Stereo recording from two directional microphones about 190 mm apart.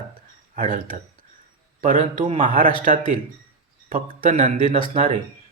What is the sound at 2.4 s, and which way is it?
Speech, 45° right (ahead or behind).